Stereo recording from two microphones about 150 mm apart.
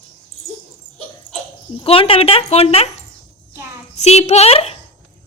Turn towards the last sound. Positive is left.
turn(degrees=45)  # may be behind; listen again after turning